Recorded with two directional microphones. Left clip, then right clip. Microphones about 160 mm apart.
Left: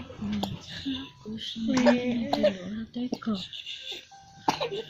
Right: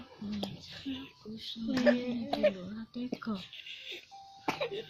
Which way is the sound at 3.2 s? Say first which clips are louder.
Left 7 dB; 35° right (ahead or behind).